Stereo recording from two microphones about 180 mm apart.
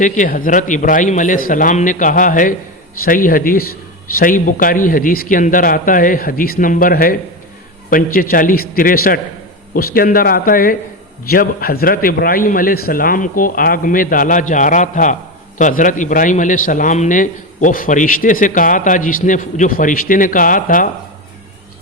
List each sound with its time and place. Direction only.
0.0 s a man's voice: 45° left (ahead or behind)